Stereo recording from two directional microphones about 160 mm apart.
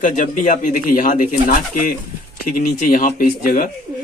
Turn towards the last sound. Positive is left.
turn(degrees=60)  # may be behind; listen again after turning